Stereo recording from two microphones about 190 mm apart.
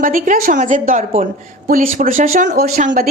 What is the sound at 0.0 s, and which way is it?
A woman's voice, 45° right (ahead or behind).